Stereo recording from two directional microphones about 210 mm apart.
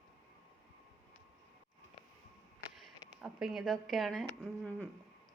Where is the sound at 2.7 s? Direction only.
Centre (ahead or behind).